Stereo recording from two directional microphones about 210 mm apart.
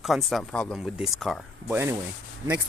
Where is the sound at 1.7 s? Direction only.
10° right (ahead or behind).